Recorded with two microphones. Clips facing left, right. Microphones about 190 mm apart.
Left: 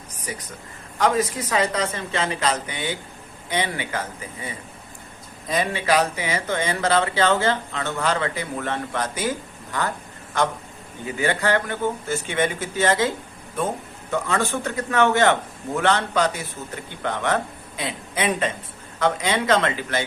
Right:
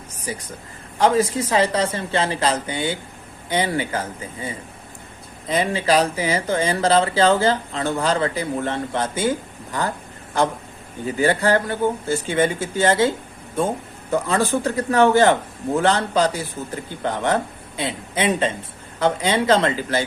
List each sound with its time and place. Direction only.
0.3 s a man's voice: 30° right (ahead or behind)
10.3 s a man's voice: 30° right (ahead or behind)